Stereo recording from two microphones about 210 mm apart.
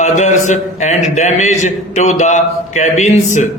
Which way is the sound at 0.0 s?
35° left (ahead or behind).